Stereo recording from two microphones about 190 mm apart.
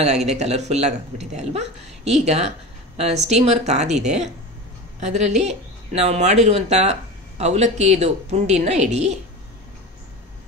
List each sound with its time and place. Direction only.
0.0 s speech: 35° right (ahead or behind)